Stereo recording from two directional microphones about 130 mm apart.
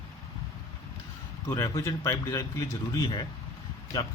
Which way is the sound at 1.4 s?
25° left (ahead or behind).